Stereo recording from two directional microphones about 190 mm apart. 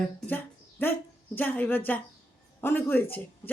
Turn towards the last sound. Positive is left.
turn(degrees=10)  # may be behind; listen again after turning